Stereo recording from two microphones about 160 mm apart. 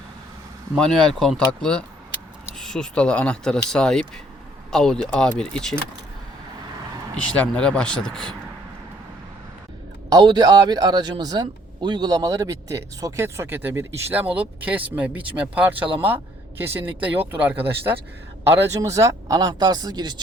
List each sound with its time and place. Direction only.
0.8 s speech: 5° left (ahead or behind)
7.3 s speech: 10° left (ahead or behind)
10.1 s a man's voice: 30° right (ahead or behind)